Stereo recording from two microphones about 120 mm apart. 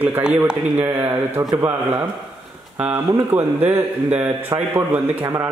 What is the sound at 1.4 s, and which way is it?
Speech, 30° right (ahead or behind).